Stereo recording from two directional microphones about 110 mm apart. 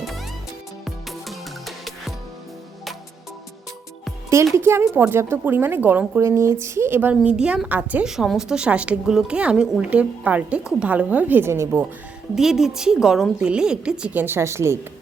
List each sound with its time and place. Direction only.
0.9 s music: centre (ahead or behind)
4.5 s a woman's voice: 20° right (ahead or behind)
12.3 s a woman's voice: 5° right (ahead or behind); by 14.8 s 25° right (ahead or behind)